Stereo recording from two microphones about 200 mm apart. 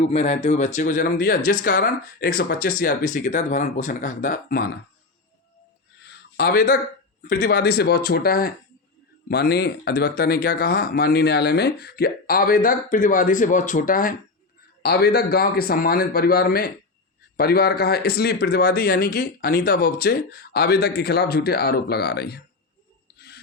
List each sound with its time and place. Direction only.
0.1 s speech: 35° left (ahead or behind); by 4.7 s 50° left (ahead or behind)
6.3 s speech: 50° left (ahead or behind)
23.1 s wheeze: 55° left (ahead or behind)